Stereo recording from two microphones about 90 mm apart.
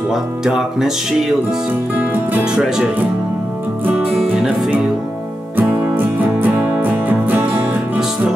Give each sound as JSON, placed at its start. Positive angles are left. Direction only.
{"t": 0.1, "sound": "speech", "side_deg": -5}
{"t": 2.0, "sound": "music", "side_deg": -15}
{"t": 2.5, "sound": "speech", "side_deg": -5}
{"t": 5.6, "sound": "music", "side_deg": -20}
{"t": 8.0, "sound": "music", "side_deg": -5}